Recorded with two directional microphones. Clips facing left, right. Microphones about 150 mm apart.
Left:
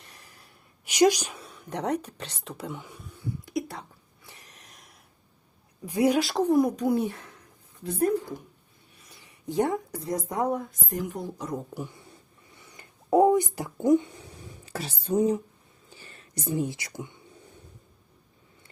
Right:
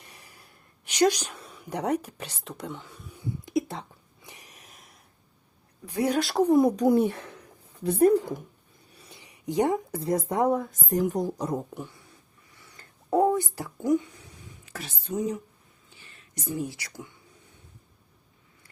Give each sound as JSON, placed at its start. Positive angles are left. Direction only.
{"t": 0.0, "sound": "sigh", "side_deg": -10}
{"t": 0.9, "sound": "a woman's voice", "side_deg": 10}
{"t": 1.4, "sound": "a sound", "side_deg": 0}
{"t": 1.6, "sound": "speech", "side_deg": -10}
{"t": 3.1, "sound": "a sound", "side_deg": -20}
{"t": 5.8, "sound": "a woman's voice", "side_deg": 10}
{"t": 6.2, "sound": "speech", "side_deg": -5}
{"t": 6.5, "sound": "speech", "side_deg": -25}
{"t": 6.7, "sound": "a child's voice", "side_deg": -45}
{"t": 9.2, "sound": "speech", "side_deg": -15}
{"t": 10.7, "sound": "a woman's voice", "side_deg": -45}
{"t": 12.5, "sound": "a sound", "side_deg": 20}
{"t": 14.6, "sound": "a woman's voice", "side_deg": 30}